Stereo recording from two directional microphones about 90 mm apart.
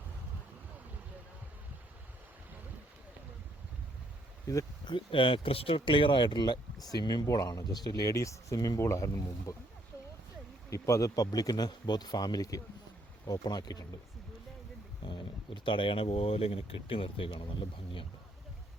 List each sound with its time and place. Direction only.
4.9 s speech: 70° left (ahead or behind); by 7.3 s 50° left (ahead or behind)
7.3 s speech: 40° left (ahead or behind)
8.8 s speech: 30° left (ahead or behind)
10.7 s speech: 35° left (ahead or behind)
15.0 s speech: 60° left (ahead or behind)